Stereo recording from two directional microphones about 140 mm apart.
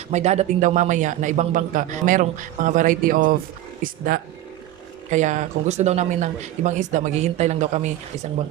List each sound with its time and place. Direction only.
0.1 s a man's voice: 55° right (ahead or behind); by 4.2 s 80° right
5.1 s a man's voice: 55° right (ahead or behind)